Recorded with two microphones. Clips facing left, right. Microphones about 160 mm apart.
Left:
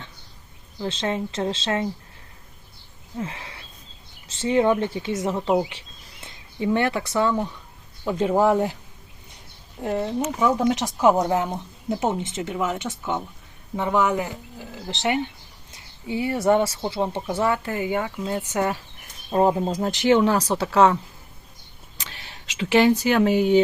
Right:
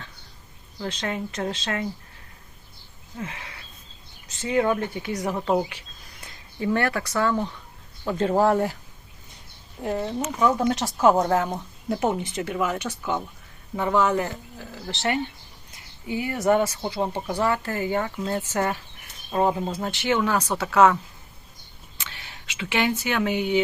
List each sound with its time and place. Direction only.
0.8 s speech: 25° left (ahead or behind)
3.2 s a sound: 30° left (ahead or behind)
4.3 s speech: 25° left (ahead or behind)
5.6 s bird: 25° left (ahead or behind)
6.7 s speech: 20° left (ahead or behind)
8.0 s speech: 10° left (ahead or behind)
9.8 s speech: 20° left (ahead or behind)
10.3 s speech: 10° left (ahead or behind)
15.7 s a sound: 25° left (ahead or behind)
16.8 s speech: 20° left (ahead or behind)
19.3 s speech: 30° left (ahead or behind)
21.9 s a sound: 40° left (ahead or behind)